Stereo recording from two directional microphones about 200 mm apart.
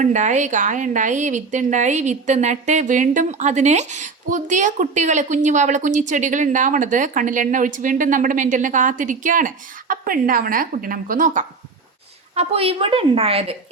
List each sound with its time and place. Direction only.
0.0 s a woman's voice: 40° right (ahead or behind)
12.3 s a woman's voice: 30° right (ahead or behind)